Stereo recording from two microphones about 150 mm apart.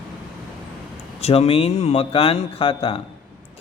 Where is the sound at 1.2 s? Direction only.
40° left (ahead or behind).